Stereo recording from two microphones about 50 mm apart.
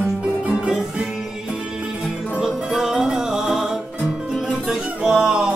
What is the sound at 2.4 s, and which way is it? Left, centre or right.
Music, centre.